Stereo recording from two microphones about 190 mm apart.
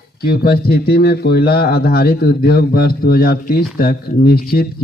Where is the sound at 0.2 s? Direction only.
55° left (ahead or behind).